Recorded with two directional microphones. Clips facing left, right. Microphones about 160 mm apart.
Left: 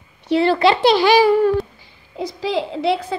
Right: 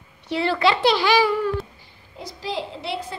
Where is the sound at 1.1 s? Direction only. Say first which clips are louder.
Left 6 dB; 45° left (ahead or behind).